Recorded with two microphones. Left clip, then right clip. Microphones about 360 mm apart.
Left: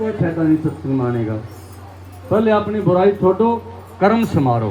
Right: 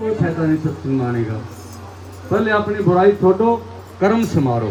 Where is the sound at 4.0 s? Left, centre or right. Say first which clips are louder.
Left 1 dB; centre.